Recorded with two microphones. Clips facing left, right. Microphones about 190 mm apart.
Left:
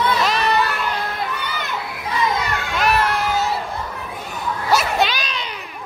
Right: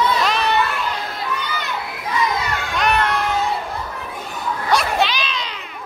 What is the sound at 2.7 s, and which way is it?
Crowd, 5° left (ahead or behind).